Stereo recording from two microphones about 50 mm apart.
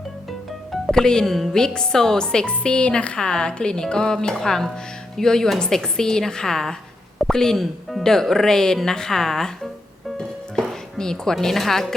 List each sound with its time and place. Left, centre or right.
0.9 s speech: centre
10.2 s music: centre